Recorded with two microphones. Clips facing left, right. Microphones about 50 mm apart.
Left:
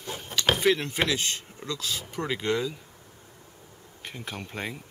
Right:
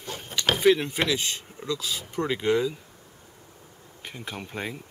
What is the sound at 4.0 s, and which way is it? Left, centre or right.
Speech, centre.